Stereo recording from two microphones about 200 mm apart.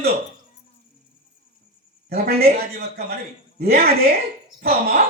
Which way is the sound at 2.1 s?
50° right (ahead or behind).